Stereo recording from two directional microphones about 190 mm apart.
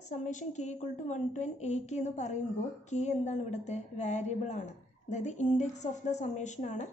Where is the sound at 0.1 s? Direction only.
40° left (ahead or behind).